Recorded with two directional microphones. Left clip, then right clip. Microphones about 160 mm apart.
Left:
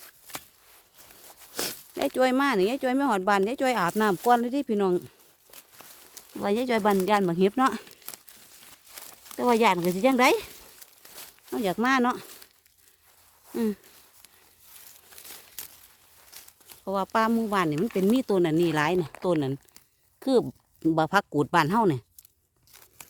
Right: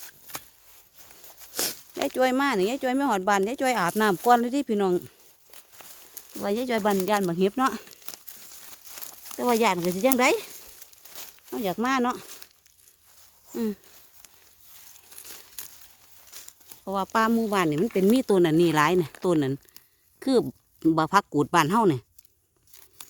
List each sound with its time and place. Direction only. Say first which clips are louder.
1.5 s speech: right 1 dB; 20° left (ahead or behind)
6.4 s speech: left 1 dB; 30° left (ahead or behind)
13.5 s a sound: left 1 dB; 35° left (ahead or behind)
15.6 s a sound: right 1 dB; 75° left (ahead or behind)
16.3 s crumpling: right 3 dB; 10° left (ahead or behind)
16.6 s speech: even; 25° left (ahead or behind)
18.1 s speech: right 3 dB; 5° right (ahead or behind)